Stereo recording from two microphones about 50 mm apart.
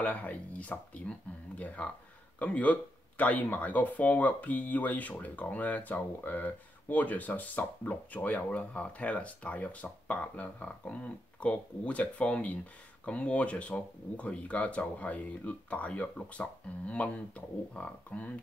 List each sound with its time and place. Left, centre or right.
0.0 s speech: left